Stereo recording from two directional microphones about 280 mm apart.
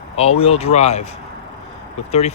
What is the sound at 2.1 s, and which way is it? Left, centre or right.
Speech, left.